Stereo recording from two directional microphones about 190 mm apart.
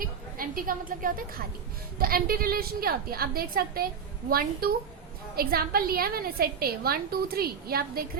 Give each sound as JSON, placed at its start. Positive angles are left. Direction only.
{"t": 0.0, "sound": "a woman's voice", "side_deg": -50}